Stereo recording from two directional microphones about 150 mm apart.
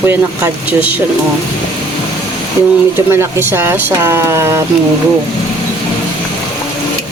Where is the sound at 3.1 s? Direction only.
15° right (ahead or behind).